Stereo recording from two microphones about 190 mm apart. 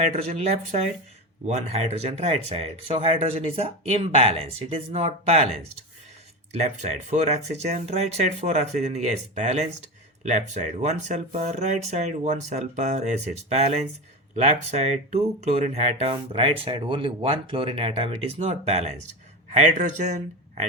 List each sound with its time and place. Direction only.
0.1 s speech: 35° right (ahead or behind)
6.5 s speech: 35° right (ahead or behind)